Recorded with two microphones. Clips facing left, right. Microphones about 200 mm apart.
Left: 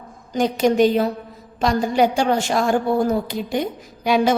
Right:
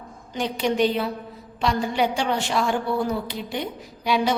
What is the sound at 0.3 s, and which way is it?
A woman's voice, 45° left (ahead or behind).